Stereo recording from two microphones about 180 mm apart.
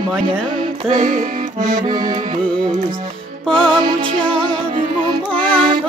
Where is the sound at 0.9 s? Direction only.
45° right (ahead or behind).